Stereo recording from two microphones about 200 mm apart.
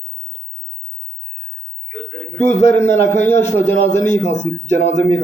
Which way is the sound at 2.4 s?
35° left (ahead or behind).